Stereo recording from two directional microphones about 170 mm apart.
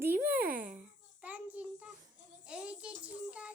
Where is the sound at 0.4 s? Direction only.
55° right (ahead or behind).